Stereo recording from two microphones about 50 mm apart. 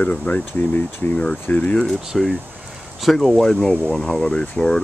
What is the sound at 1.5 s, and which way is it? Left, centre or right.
Speech, left.